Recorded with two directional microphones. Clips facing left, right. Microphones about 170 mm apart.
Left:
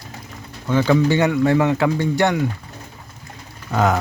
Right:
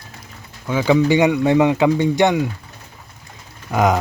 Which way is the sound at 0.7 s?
10° right (ahead or behind).